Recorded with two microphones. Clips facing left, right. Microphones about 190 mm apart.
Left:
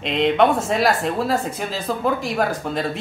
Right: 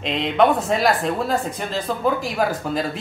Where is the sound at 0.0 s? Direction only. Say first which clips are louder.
Left 1 dB; centre (ahead or behind).